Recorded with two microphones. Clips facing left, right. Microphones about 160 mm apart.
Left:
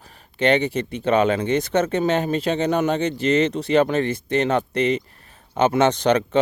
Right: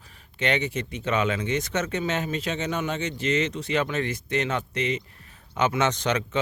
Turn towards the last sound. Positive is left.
turn(degrees=30)  # may be behind; listen again after turning